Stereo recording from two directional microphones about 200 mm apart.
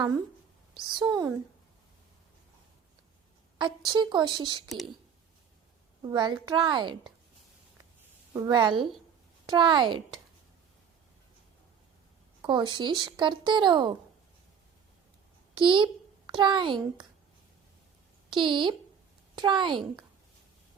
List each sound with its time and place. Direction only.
0.7 s speech: 20° right (ahead or behind)
3.6 s speech: 20° right (ahead or behind)
6.1 s speech: 20° right (ahead or behind)
8.3 s a woman's voice: 20° right (ahead or behind)
12.4 s speech: 20° right (ahead or behind)
15.5 s a child's voice: 25° right (ahead or behind)
18.3 s speech: 25° right (ahead or behind)